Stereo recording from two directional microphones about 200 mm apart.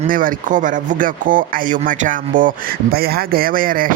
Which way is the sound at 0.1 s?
45° right (ahead or behind).